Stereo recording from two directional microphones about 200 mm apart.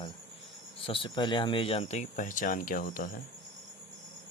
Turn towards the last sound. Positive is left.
turn(degrees=45)  # may be behind; listen again after turning